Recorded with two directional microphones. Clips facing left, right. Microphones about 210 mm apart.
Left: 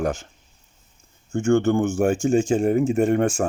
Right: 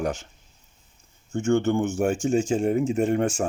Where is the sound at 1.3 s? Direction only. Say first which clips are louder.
Left 3 dB; 50° left (ahead or behind).